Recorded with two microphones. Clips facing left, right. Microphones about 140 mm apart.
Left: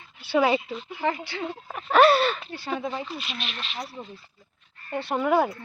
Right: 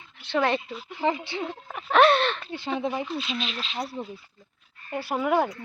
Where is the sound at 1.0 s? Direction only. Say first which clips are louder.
Right 2 dB; 20° right (ahead or behind).